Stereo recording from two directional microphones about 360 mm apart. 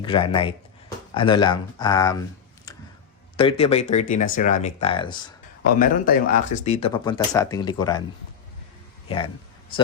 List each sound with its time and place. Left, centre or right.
0.0 s speech: centre
3.3 s speech: centre
5.6 s speech: left